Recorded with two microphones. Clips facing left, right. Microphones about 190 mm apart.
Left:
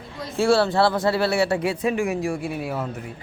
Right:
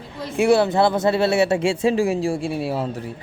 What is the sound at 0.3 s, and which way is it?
Speech, 20° right (ahead or behind).